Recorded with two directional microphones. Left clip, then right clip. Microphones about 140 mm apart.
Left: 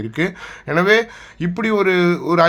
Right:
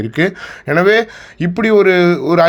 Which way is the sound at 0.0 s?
35° right (ahead or behind).